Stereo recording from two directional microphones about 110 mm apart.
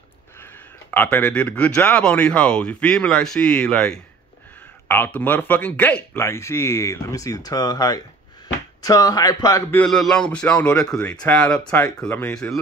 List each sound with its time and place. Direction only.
0.4 s speech: 15° left (ahead or behind); by 9.6 s 35° left (ahead or behind)
9.8 s speech: 5° left (ahead or behind)